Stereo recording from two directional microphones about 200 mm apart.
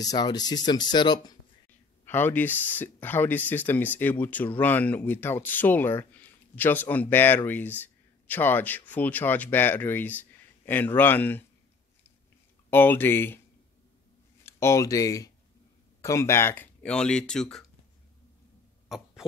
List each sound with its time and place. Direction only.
0.0 s speech: 20° left (ahead or behind)
2.0 s speech: 10° left (ahead or behind)
12.6 s speech: 10° left (ahead or behind)
14.4 s speech: 15° left (ahead or behind)
18.9 s throat clearing: centre (ahead or behind)